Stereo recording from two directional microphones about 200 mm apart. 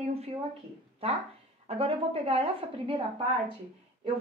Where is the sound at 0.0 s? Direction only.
30° right (ahead or behind).